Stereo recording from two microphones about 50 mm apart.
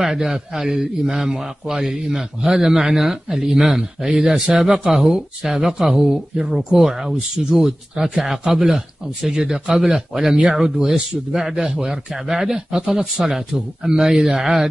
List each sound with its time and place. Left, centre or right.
0.0 s a man's voice: centre
4.1 s a man's voice: centre